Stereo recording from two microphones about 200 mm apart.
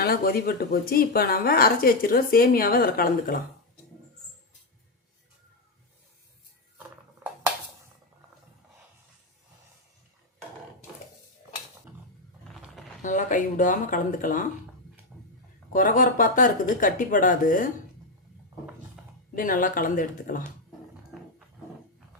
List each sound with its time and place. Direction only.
0.0 s speech: 50° left (ahead or behind)
13.0 s speech: 40° left (ahead or behind)
15.1 s a sound: 5° right (ahead or behind)
15.7 s speech: 40° left (ahead or behind)
19.4 s speech: 40° left (ahead or behind)